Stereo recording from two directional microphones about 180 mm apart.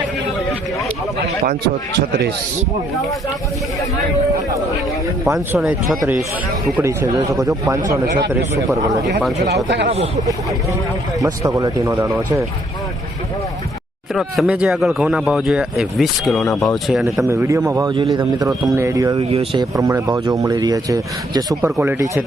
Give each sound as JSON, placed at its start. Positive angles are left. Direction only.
{"t": 5.5, "sound": "speech", "side_deg": 0}
{"t": 6.8, "sound": "speech", "side_deg": -15}
{"t": 9.6, "sound": "speech", "side_deg": -75}
{"t": 11.2, "sound": "speech", "side_deg": -20}
{"t": 14.1, "sound": "speech", "side_deg": 0}
{"t": 17.2, "sound": "speech", "side_deg": -15}
{"t": 19.3, "sound": "speech", "side_deg": -30}
{"t": 19.7, "sound": "speech", "side_deg": -20}